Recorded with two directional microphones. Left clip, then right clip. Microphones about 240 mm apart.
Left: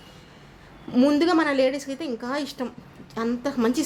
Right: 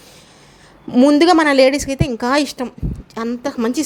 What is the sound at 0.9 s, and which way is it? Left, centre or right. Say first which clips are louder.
A woman's voice: right 9 dB; right.